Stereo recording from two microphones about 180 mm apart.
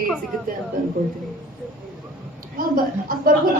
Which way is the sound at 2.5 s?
50° right (ahead or behind).